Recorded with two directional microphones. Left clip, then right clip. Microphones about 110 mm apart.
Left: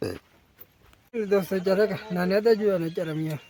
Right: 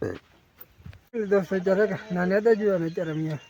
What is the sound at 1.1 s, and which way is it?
Speech, 10° left (ahead or behind).